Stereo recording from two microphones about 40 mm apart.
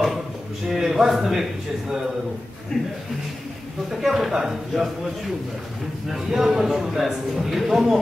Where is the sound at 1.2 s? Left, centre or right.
Centre.